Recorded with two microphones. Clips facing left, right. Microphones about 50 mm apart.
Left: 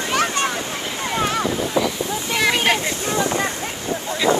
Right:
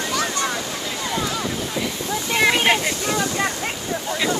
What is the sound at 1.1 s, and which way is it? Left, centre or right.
Boat, left.